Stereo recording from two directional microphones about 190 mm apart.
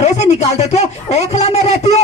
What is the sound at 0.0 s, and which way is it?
Speech, 35° left (ahead or behind).